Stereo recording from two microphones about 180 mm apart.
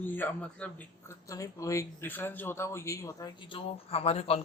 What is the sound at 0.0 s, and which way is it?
A man's voice, 10° left (ahead or behind).